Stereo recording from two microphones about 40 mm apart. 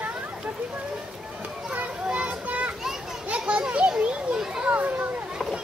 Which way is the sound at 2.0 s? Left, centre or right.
Right.